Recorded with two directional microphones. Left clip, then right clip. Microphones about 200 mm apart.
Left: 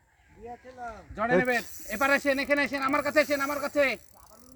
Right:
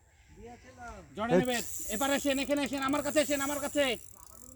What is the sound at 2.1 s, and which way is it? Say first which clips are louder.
Speech: left 5 dB; 5° left (ahead or behind).